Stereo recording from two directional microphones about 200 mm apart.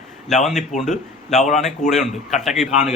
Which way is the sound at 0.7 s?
35° left (ahead or behind).